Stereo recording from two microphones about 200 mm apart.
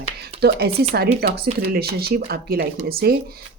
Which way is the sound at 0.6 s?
50° right (ahead or behind).